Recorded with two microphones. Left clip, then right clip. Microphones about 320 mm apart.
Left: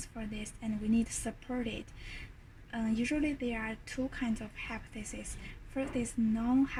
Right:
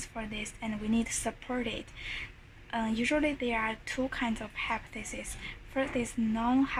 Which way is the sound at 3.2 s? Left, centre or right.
Right.